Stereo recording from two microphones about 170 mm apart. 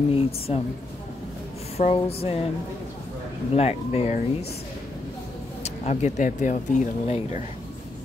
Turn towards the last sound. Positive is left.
turn(degrees=45)  # may be behind; listen again after turning